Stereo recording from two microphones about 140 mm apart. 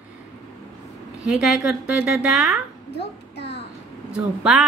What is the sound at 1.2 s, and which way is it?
A woman's voice, 5° right (ahead or behind).